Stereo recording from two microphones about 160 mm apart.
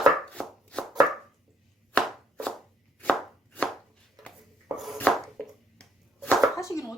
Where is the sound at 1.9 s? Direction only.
5° left (ahead or behind).